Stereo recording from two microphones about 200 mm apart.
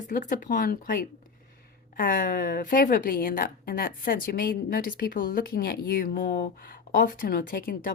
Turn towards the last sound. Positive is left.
turn(degrees=45)  # may be behind; listen again after turning